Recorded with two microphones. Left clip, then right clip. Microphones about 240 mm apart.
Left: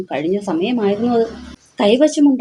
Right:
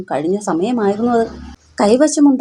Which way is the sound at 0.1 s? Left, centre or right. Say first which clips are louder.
Right 2 dB; right.